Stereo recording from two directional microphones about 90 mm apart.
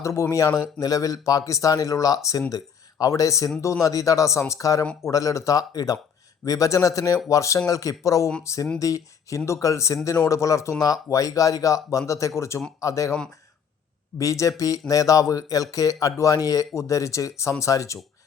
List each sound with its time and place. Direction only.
0.0 s speech: 35° left (ahead or behind)
14.2 s speech: 35° left (ahead or behind)